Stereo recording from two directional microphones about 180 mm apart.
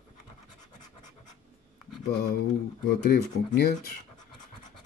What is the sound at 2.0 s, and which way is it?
Speech, 60° left (ahead or behind).